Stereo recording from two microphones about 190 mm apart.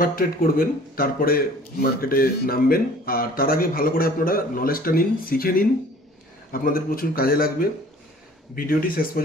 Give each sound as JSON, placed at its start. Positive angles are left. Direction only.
{"t": 0.0, "sound": "a man's voice", "side_deg": 50}